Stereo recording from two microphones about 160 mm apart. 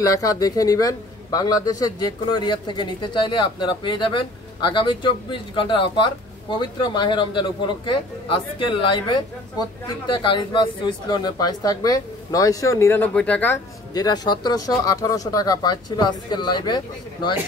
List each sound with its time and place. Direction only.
0.0 s a man's voice: 20° left (ahead or behind)
13.9 s a man's voice: 25° left (ahead or behind)